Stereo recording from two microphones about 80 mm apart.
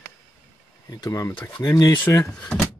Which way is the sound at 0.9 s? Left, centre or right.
Left.